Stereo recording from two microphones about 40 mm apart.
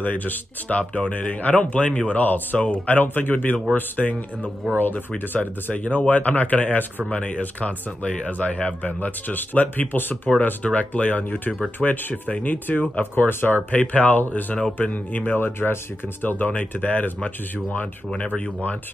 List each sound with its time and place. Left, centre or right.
0.0 s speech: left
1.9 s speech: left
2.1 s speech: left
8.8 s speech: left
10.6 s speech: left
13.0 s speech: left
13.7 s speech: left
15.3 s speech: left
18.1 s speech: left